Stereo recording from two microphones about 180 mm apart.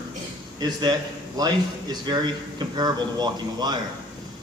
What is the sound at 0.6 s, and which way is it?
Speech, 25° right (ahead or behind).